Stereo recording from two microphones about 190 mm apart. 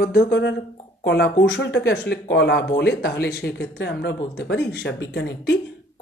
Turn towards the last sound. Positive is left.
turn(degrees=65)  # may be behind; listen again after turning